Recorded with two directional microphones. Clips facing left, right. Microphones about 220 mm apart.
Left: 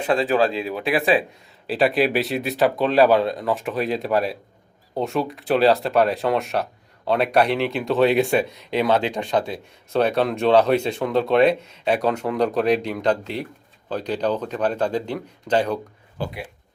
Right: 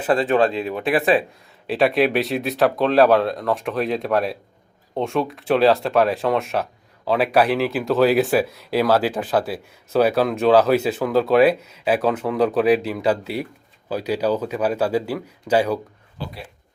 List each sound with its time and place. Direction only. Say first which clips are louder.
0.0 s speech: right 2 dB; centre (ahead or behind)
16.2 s speech: left 4 dB; 50° left (ahead or behind)